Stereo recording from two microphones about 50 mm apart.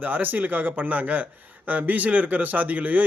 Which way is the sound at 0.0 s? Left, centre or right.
Right.